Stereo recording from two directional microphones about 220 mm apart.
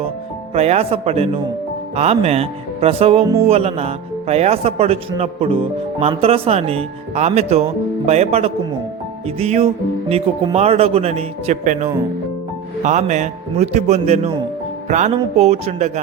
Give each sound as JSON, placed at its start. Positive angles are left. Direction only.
{"t": 0.5, "sound": "a man's voice", "side_deg": -30}